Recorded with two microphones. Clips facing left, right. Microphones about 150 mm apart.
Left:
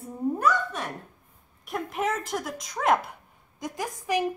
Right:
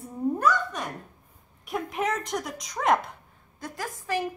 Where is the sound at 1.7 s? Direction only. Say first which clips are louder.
Even; centre (ahead or behind).